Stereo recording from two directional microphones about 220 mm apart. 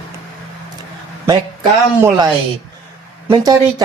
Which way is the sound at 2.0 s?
15° right (ahead or behind).